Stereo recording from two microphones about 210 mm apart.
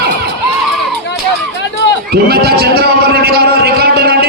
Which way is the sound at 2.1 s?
50° right (ahead or behind).